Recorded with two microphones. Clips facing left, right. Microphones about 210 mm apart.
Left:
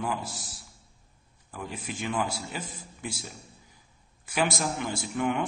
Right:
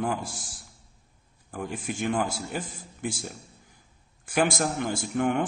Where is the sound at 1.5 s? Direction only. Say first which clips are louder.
Right 4 dB; 50° right (ahead or behind).